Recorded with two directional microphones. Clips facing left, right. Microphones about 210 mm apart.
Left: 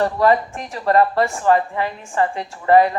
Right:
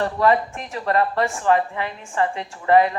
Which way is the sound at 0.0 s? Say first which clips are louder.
Left 2 dB; 40° left (ahead or behind).